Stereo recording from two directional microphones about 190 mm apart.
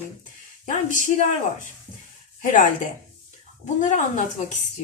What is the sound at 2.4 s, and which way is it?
Speech, 40° left (ahead or behind).